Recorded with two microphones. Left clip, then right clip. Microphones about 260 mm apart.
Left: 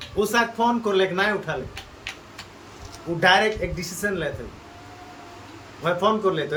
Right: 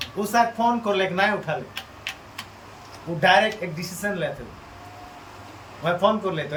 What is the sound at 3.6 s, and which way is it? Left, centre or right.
Speech, centre.